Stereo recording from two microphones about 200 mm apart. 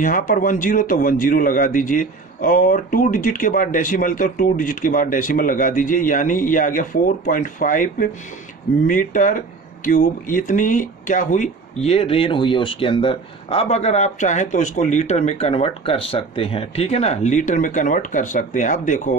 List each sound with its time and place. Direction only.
0.0 s speech: 40° left (ahead or behind)